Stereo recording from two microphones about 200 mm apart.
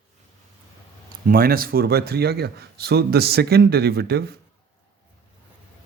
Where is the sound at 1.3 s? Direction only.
45° right (ahead or behind).